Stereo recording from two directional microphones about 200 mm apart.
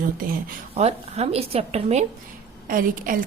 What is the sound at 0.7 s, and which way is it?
A woman's voice, 30° right (ahead or behind).